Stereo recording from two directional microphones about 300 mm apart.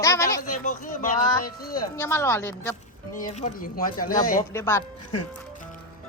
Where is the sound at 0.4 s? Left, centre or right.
Left.